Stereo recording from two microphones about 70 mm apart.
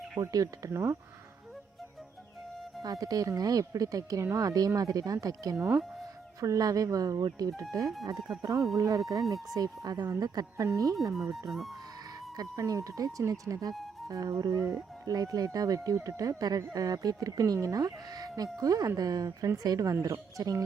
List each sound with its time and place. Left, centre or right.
0.2 s speech: right
0.7 s speech: right
2.8 s speech: right
11.1 s speech: centre
12.4 s speech: right
15.0 s speech: right